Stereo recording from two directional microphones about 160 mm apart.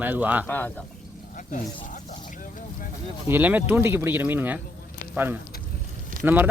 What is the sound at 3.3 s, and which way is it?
Speech, 10° right (ahead or behind).